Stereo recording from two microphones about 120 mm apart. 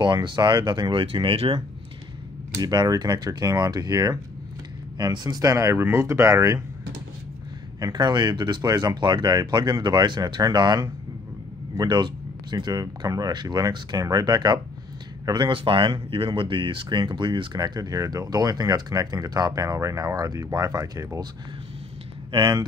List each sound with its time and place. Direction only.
0.0 s speech: 40° right (ahead or behind)
2.6 s speech: 30° right (ahead or behind)
7.8 s speech: 35° right (ahead or behind)
22.3 s speech: 40° right (ahead or behind)